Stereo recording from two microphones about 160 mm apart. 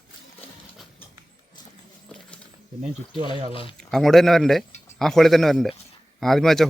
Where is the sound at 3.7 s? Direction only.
Centre (ahead or behind).